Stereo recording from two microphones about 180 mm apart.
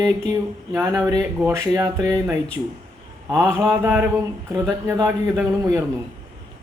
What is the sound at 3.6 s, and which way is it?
A man's voice, 15° right (ahead or behind).